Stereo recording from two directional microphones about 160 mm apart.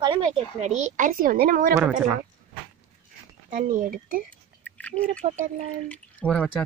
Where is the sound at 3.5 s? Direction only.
55° right (ahead or behind).